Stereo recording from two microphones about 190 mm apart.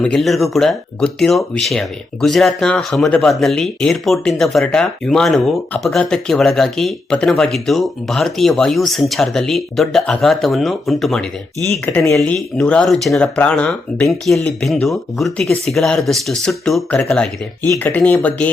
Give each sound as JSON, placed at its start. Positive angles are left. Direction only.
{"t": 0.0, "sound": "speech", "side_deg": 5}